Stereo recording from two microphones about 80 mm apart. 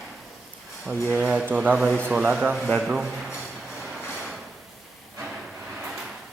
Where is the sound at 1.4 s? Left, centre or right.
Right.